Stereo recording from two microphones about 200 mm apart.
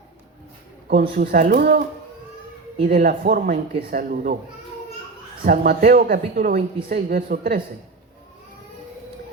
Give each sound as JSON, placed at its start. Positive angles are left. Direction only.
{"t": 0.9, "sound": "speech", "side_deg": -45}
{"t": 2.9, "sound": "speech", "side_deg": -45}
{"t": 5.4, "sound": "speech", "side_deg": -50}